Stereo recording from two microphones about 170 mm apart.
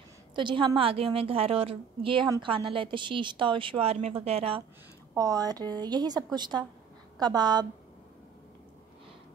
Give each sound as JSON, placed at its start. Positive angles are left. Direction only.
{"t": 0.4, "sound": "a woman's voice", "side_deg": -30}
{"t": 5.1, "sound": "a woman's voice", "side_deg": -20}